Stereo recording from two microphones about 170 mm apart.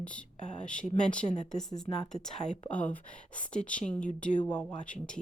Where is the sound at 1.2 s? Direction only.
40° left (ahead or behind).